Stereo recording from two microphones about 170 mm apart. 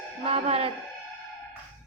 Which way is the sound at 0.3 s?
35° right (ahead or behind).